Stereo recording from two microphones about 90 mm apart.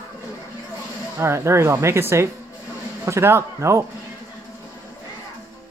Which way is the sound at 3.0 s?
30° right (ahead or behind).